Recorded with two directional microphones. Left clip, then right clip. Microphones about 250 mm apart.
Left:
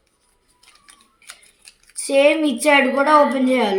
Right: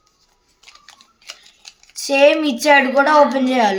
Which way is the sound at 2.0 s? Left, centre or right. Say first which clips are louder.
Right 2 dB; centre.